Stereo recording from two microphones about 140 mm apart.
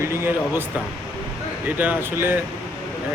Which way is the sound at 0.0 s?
15° right (ahead or behind).